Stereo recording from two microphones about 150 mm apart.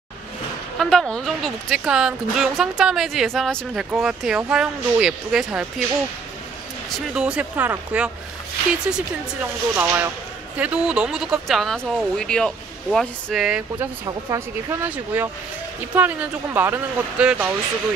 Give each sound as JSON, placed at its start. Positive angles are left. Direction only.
{"t": 0.7, "sound": "speech", "side_deg": 0}
{"t": 6.9, "sound": "speech", "side_deg": -5}
{"t": 14.3, "sound": "speech", "side_deg": -20}